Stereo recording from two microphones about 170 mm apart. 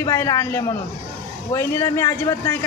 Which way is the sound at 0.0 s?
20° left (ahead or behind).